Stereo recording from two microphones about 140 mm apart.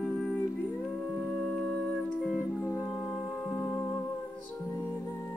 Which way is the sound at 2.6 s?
20° left (ahead or behind).